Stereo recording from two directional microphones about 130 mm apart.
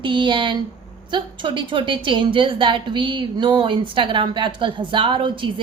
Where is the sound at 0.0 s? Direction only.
40° right (ahead or behind).